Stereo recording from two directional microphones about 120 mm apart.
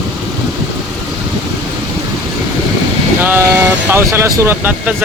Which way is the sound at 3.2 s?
20° right (ahead or behind).